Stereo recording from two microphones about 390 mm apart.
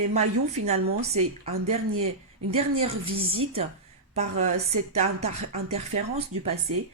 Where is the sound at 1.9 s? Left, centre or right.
Right.